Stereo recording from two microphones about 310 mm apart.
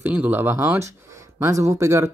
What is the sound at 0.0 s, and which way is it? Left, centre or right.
Speech, centre.